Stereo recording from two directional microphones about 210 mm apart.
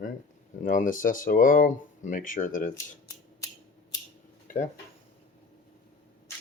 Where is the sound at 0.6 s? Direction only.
40° left (ahead or behind).